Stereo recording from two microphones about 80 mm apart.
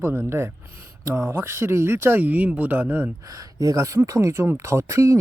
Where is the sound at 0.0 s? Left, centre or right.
Right.